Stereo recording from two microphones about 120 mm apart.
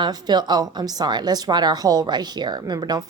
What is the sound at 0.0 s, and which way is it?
A woman's voice, 35° right (ahead or behind).